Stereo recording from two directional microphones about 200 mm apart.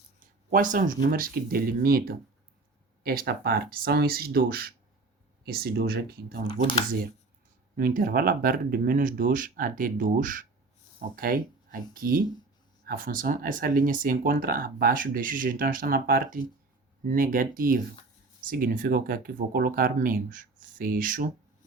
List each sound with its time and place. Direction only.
0.5 s speech: 40° right (ahead or behind)
6.4 s speech: 25° left (ahead or behind)
7.8 s speech: 45° right (ahead or behind)